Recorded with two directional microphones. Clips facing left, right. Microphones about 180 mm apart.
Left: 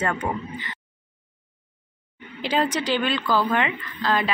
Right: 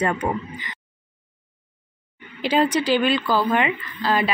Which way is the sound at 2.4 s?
10° right (ahead or behind).